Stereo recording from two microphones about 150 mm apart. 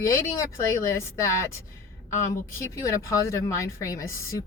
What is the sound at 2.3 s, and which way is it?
Speech, 20° left (ahead or behind).